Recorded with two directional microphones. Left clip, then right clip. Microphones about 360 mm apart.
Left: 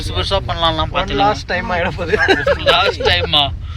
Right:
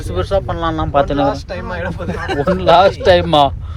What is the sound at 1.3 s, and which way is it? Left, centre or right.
Speech, centre.